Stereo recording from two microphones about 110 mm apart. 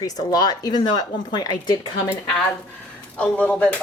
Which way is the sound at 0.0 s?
35° left (ahead or behind).